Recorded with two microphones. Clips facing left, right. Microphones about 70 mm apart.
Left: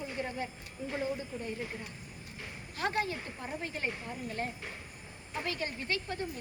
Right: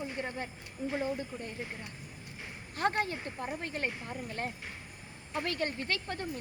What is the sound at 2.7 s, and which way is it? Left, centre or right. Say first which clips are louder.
Speech: right 2 dB; right.